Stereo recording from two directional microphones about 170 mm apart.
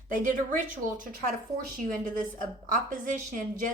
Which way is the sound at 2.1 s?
50° right (ahead or behind).